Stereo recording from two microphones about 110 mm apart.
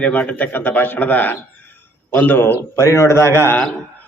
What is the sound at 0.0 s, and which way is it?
A man's voice, 15° left (ahead or behind).